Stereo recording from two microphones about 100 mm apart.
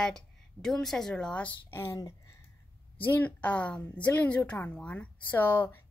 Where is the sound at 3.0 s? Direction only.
15° left (ahead or behind).